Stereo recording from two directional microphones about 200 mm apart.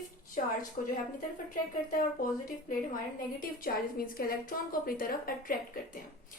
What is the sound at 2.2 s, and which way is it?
A woman's voice, 45° left (ahead or behind).